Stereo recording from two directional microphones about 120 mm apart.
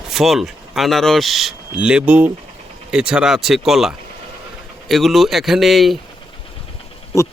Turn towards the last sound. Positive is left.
turn(degrees=25)  # may be behind; listen again after turning